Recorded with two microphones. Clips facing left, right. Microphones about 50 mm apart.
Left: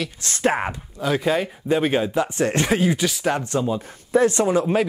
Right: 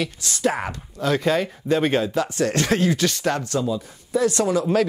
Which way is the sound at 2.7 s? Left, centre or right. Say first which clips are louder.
Even; centre.